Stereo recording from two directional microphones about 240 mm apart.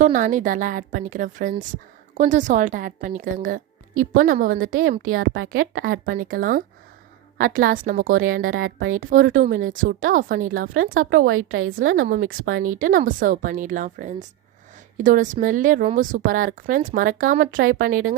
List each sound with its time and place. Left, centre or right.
0.0 s a woman's voice: right
5.0 s a woman's voice: right
5.5 s a woman's voice: right
8.5 s a woman's voice: right
9.0 s a woman's voice: right
11.3 s a woman's voice: right
11.9 s a woman's voice: right
12.2 s a woman's voice: right
12.6 s a woman's voice: right